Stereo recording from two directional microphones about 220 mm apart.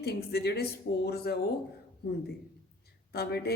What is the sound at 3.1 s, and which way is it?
Speech, 45° left (ahead or behind).